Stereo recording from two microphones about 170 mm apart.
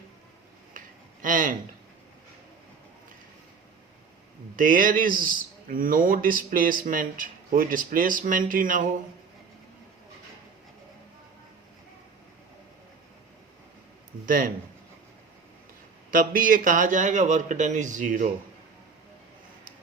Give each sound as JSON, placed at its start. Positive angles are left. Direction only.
{"t": 1.2, "sound": "a sound", "side_deg": -50}
{"t": 4.5, "sound": "speech", "side_deg": -55}
{"t": 14.3, "sound": "speech", "side_deg": -55}
{"t": 16.1, "sound": "speech", "side_deg": -55}